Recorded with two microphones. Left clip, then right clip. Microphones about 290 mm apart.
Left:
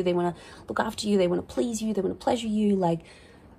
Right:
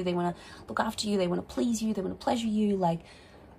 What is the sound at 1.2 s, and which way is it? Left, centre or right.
Speech, left.